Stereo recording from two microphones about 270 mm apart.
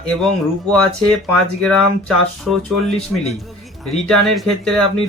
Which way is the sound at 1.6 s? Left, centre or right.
Centre.